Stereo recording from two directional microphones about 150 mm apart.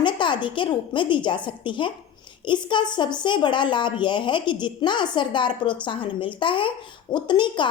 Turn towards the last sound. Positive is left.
turn(degrees=30)  # may be behind; listen again after turning